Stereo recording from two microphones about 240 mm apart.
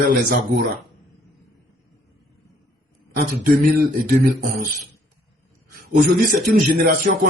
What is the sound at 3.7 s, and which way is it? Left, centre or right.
Speech, right.